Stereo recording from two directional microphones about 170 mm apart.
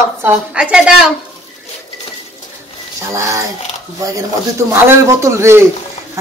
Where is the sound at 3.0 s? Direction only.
15° right (ahead or behind).